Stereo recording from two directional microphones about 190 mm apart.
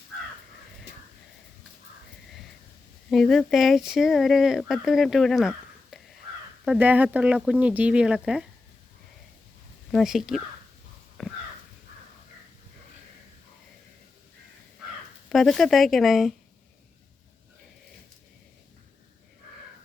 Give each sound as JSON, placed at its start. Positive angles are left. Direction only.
{"t": 3.1, "sound": "speech", "side_deg": 0}
{"t": 9.9, "sound": "speech", "side_deg": 0}
{"t": 11.2, "sound": "a sound", "side_deg": 0}
{"t": 15.3, "sound": "speech", "side_deg": 0}